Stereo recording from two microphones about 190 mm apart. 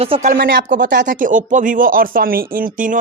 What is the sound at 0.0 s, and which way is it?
Speech, 35° right (ahead or behind).